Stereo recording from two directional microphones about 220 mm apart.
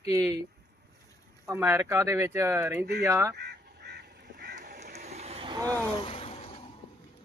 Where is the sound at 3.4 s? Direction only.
50° right (ahead or behind).